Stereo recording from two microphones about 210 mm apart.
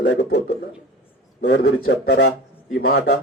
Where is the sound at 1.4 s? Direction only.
55° left (ahead or behind).